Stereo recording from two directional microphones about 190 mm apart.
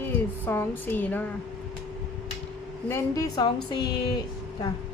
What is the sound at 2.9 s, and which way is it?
Speech, 15° left (ahead or behind).